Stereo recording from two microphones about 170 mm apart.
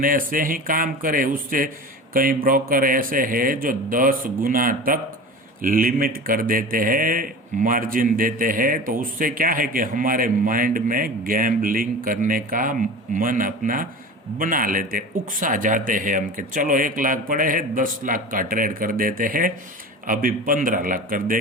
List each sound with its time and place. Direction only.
0.0 s a man's voice: 55° right (ahead or behind)